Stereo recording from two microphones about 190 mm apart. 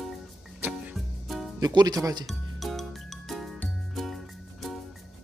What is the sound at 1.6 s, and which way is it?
Speech, 20° right (ahead or behind).